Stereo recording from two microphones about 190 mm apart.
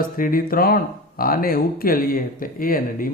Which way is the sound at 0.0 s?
45° left (ahead or behind).